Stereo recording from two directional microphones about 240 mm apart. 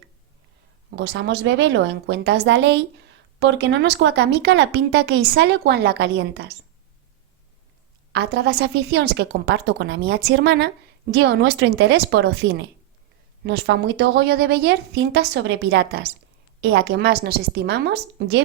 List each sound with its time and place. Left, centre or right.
0.9 s a woman's voice: right
8.1 s a woman's voice: right